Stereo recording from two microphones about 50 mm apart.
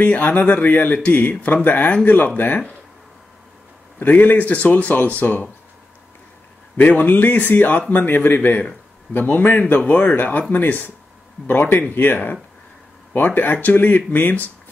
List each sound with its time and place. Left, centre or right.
0.0 s speech: left
4.0 s speech: left
6.9 s speech: left
9.8 s speech: left